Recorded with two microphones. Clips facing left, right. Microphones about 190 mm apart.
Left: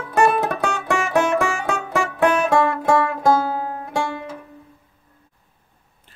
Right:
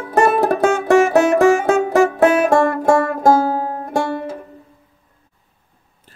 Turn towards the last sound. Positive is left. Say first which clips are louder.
# right 5 dB
turn(degrees=-45)  # may be behind; listen again after turning